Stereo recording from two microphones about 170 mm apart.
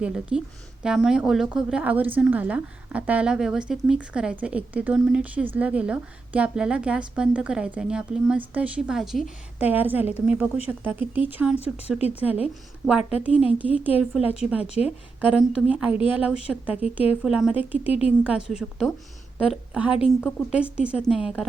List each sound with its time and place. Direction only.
0.0 s a woman's voice: 5° right (ahead or behind)
12.8 s a woman's voice: 5° right (ahead or behind)
14.7 s a woman's voice: 40° left (ahead or behind)
15.2 s a woman's voice: 5° right (ahead or behind)
17.8 s a woman's voice: 35° left (ahead or behind)
18.2 s a woman's voice: 5° right (ahead or behind)